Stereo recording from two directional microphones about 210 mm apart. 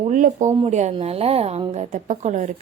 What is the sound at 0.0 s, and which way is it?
Speech, 35° right (ahead or behind).